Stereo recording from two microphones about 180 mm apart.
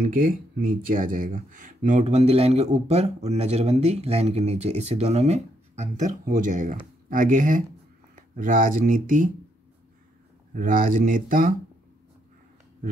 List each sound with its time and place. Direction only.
0.0 s speech: 50° right (ahead or behind)
10.5 s speech: 50° right (ahead or behind)